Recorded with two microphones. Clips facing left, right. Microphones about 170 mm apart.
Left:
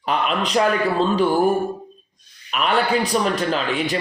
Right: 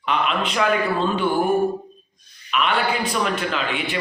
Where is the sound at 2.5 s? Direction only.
40° left (ahead or behind).